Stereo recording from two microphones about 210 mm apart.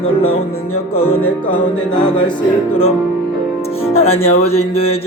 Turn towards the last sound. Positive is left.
turn(degrees=30)  # may be behind; listen again after turning